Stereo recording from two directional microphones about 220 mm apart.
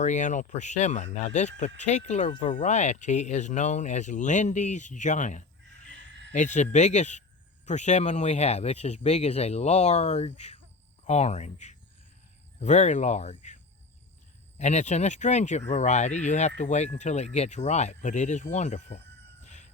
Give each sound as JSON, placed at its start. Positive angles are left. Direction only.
{"t": 0.0, "sound": "speech", "side_deg": 35}
{"t": 14.6, "sound": "speech", "side_deg": 30}
{"t": 19.5, "sound": "crowing", "side_deg": 30}